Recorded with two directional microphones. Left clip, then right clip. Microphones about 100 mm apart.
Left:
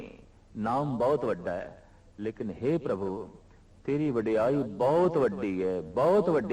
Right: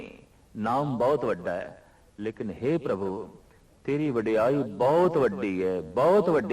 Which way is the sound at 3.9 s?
35° right (ahead or behind).